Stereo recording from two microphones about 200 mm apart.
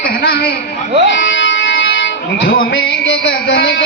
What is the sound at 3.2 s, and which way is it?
Speech, 60° left (ahead or behind).